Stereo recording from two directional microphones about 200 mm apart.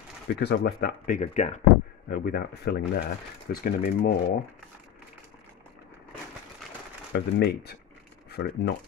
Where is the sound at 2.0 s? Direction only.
45° left (ahead or behind).